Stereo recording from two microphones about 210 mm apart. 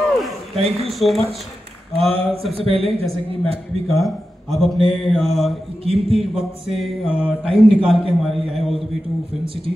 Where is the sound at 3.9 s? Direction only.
Centre (ahead or behind).